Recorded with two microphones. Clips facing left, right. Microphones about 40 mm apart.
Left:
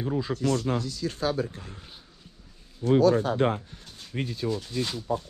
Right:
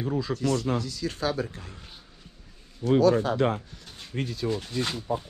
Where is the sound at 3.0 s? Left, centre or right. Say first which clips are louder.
Even; right.